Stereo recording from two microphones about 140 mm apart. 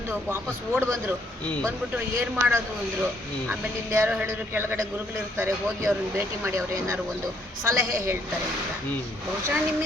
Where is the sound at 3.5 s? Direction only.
15° right (ahead or behind).